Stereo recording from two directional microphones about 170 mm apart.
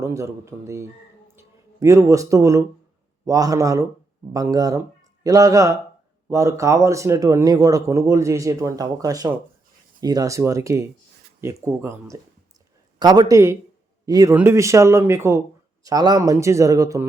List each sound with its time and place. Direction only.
0.0 s speech: 20° right (ahead or behind)